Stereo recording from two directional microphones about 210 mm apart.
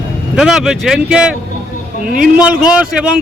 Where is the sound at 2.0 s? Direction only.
40° right (ahead or behind).